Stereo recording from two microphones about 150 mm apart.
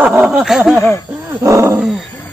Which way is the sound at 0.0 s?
10° right (ahead or behind).